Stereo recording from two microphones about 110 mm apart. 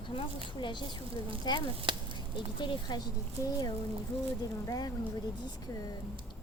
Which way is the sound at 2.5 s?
45° left (ahead or behind).